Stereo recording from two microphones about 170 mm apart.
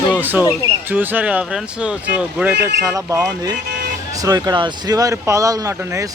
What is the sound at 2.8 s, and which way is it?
Speech, 20° right (ahead or behind).